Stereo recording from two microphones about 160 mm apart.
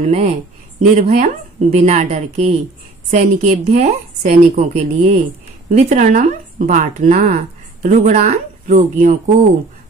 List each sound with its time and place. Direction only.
0.0 s speech: 40° right (ahead or behind)